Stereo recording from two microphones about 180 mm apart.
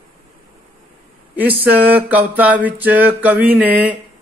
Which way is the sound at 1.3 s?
10° right (ahead or behind).